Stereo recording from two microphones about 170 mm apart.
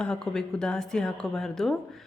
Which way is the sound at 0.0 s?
5° left (ahead or behind).